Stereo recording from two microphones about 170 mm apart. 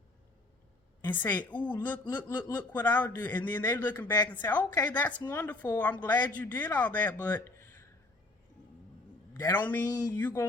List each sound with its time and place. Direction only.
1.0 s speech: 10° left (ahead or behind)
4.5 s a woman's voice: 25° left (ahead or behind)
4.9 s speech: 10° left (ahead or behind)
9.5 s speech: 10° left (ahead or behind)
9.8 s a woman's voice: 20° left (ahead or behind)
10.2 s speech: 10° left (ahead or behind)